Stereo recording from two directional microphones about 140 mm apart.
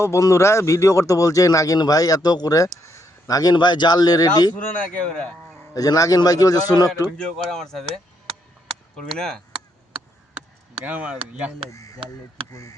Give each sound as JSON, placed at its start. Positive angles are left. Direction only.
{"t": 0.0, "sound": "a man's voice", "side_deg": 20}
{"t": 4.9, "sound": "speech", "side_deg": 5}
{"t": 5.7, "sound": "speech", "side_deg": 25}
{"t": 7.2, "sound": "speech", "side_deg": 5}
{"t": 7.9, "sound": "a sound", "side_deg": -45}
{"t": 9.1, "sound": "speech", "side_deg": 5}
{"t": 10.8, "sound": "speech", "side_deg": -10}
{"t": 11.7, "sound": "caw", "side_deg": 25}